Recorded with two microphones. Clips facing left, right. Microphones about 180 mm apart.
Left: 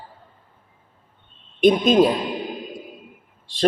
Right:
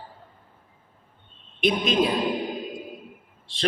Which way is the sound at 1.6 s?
45° left (ahead or behind).